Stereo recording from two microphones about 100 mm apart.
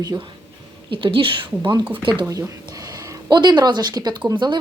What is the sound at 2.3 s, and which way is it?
Speech, 35° right (ahead or behind).